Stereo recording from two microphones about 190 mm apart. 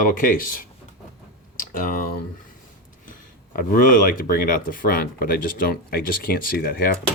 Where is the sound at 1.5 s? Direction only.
45° left (ahead or behind).